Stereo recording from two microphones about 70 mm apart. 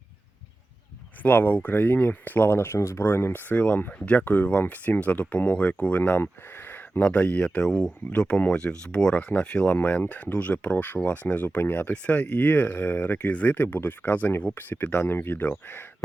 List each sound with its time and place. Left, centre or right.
1.2 s speech: left
3.5 s speech: centre
7.0 s speech: centre
9.7 s speech: left